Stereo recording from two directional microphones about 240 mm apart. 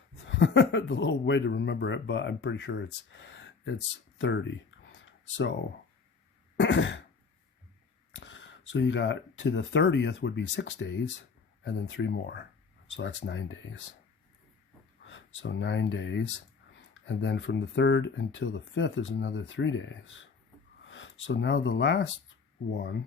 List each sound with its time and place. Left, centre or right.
0.3 s speech: left
4.2 s a sound: left
6.6 s throat clearing: left
8.1 s speech: left
15.0 s speech: left